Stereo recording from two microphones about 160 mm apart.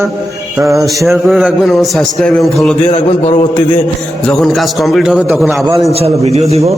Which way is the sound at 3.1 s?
35° left (ahead or behind).